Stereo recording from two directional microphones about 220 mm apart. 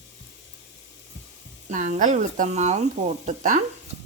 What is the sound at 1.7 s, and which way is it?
Speech, 35° right (ahead or behind).